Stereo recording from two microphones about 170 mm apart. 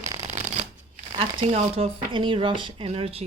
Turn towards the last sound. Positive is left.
turn(degrees=-35)  # may be behind; listen again after turning